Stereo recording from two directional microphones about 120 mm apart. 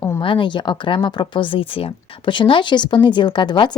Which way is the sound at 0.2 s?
45° left (ahead or behind).